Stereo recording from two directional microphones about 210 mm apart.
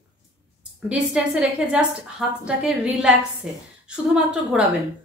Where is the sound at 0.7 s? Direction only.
5° right (ahead or behind).